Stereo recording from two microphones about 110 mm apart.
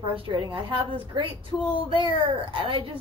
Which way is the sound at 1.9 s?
50° right (ahead or behind).